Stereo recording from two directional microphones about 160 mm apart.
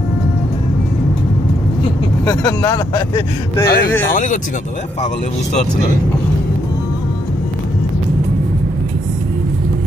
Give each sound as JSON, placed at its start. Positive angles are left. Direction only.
{"t": 2.2, "sound": "speech", "side_deg": 25}
{"t": 3.6, "sound": "speech", "side_deg": 75}
{"t": 4.1, "sound": "speech", "side_deg": 55}